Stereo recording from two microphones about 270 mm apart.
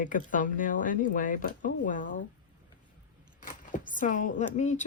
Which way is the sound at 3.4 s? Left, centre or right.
Left.